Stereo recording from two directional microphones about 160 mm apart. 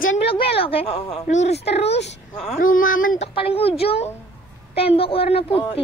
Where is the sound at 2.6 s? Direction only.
60° left (ahead or behind).